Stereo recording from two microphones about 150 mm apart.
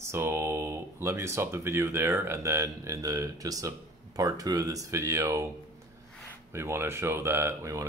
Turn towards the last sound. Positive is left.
turn(degrees=-20)  # may be behind; listen again after turning